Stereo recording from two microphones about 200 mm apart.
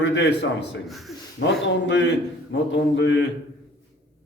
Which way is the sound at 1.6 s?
60° left (ahead or behind).